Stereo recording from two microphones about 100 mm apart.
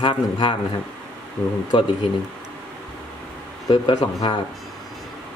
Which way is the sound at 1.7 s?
55° left (ahead or behind).